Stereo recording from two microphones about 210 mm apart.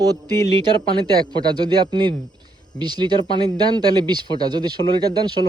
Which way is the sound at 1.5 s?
20° right (ahead or behind).